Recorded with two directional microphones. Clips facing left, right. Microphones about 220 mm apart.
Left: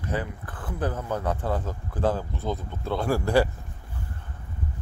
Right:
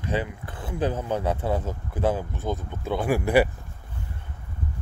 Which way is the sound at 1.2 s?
10° right (ahead or behind).